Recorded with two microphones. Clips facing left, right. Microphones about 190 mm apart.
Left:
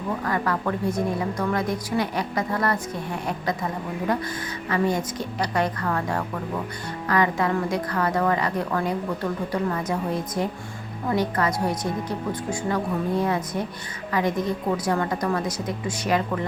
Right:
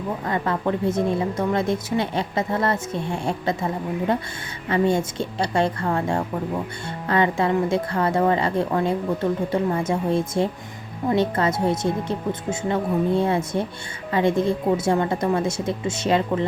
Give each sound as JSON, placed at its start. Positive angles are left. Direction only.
{"t": 0.3, "sound": "a woman's voice", "side_deg": -25}